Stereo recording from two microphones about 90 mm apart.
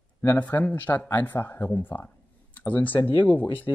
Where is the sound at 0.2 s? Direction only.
20° left (ahead or behind).